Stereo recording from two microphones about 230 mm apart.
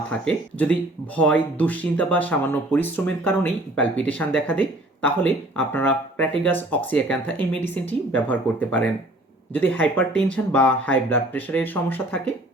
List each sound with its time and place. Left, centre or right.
0.1 s speech: centre